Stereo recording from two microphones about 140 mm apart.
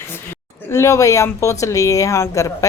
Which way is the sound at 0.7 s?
20° left (ahead or behind).